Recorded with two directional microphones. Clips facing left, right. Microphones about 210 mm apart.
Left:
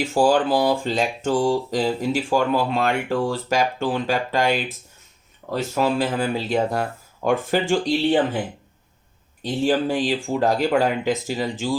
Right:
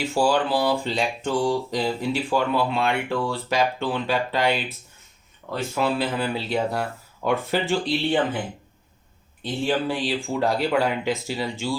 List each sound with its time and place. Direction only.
0.1 s speech: 45° left (ahead or behind)
9.4 s speech: 45° left (ahead or behind)